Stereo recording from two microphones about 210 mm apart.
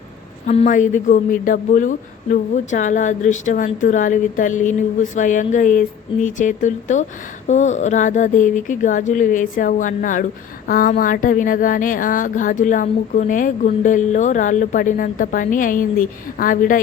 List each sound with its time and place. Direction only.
0.4 s a woman's voice: 35° left (ahead or behind)